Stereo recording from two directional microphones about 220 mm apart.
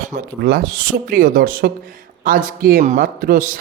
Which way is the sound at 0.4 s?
40° right (ahead or behind).